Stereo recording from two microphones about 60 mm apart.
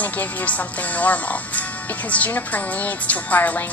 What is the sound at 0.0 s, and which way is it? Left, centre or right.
A woman's voice, left.